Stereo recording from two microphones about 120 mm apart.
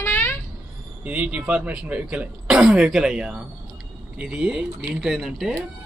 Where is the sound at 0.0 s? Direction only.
20° left (ahead or behind).